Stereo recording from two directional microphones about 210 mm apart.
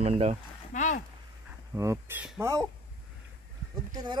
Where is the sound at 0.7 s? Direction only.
35° left (ahead or behind).